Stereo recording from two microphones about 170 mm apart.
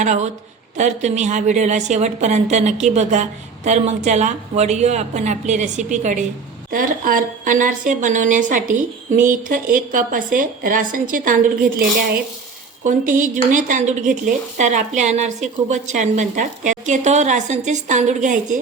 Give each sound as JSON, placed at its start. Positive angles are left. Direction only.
{"t": 0.0, "sound": "speech", "side_deg": -45}